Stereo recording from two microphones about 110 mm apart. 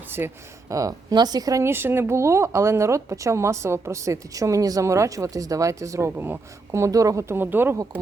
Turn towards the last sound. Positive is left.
turn(degrees=-20)  # may be behind; listen again after turning